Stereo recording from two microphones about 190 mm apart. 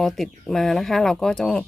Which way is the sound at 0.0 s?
Centre (ahead or behind).